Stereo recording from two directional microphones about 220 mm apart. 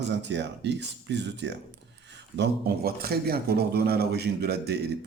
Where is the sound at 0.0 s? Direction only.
50° right (ahead or behind).